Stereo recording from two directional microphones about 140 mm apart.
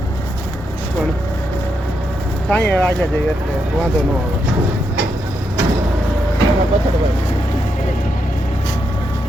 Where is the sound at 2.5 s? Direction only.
10° left (ahead or behind).